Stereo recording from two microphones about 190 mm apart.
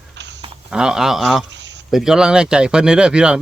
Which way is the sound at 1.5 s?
70° right (ahead or behind).